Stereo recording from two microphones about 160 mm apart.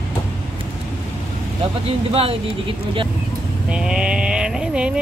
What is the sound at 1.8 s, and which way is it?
Speech, 35° right (ahead or behind).